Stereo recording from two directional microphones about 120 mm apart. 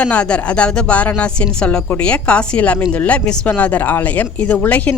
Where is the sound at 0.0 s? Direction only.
10° left (ahead or behind).